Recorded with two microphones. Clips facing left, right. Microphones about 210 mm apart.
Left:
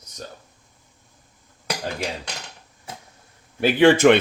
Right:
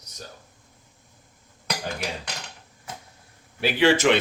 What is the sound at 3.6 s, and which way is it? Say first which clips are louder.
Speech: left 5 dB; 50° left (ahead or behind).